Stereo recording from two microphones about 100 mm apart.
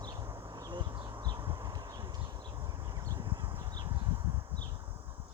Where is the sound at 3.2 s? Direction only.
50° right (ahead or behind).